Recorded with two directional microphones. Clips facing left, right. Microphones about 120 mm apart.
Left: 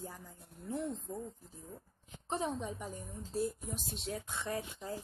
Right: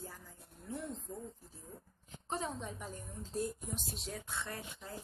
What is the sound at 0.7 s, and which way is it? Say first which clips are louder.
Speech: left 5 dB; 30° left (ahead or behind).